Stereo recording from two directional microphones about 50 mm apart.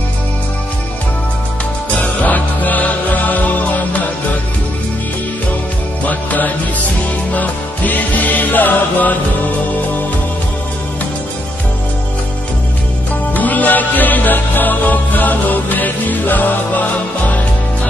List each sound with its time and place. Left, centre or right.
2.0 s music: left
6.0 s music: left
13.3 s music: left